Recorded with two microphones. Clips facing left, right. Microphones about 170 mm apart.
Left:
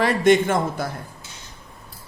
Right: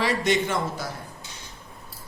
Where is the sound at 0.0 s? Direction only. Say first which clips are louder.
Left 7 dB; 50° left (ahead or behind).